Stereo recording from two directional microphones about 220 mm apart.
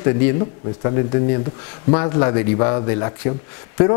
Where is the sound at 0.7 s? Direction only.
25° left (ahead or behind).